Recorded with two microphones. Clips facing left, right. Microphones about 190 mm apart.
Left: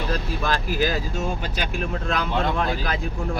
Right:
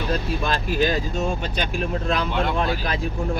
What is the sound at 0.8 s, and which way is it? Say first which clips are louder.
Speech: right 2 dB; 5° left (ahead or behind).